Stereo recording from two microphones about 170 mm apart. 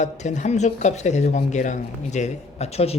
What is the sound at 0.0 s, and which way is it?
Speech, 45° left (ahead or behind).